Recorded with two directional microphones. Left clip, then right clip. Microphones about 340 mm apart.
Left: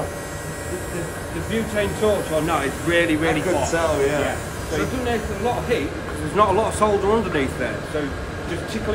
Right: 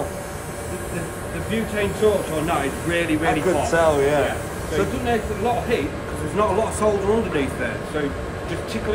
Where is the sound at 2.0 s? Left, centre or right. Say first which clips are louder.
Right 1 dB; centre.